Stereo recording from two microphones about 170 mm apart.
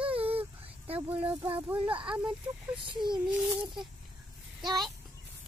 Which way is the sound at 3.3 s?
5° right (ahead or behind).